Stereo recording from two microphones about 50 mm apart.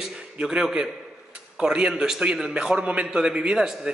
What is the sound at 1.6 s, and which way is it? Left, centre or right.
A man's voice, centre.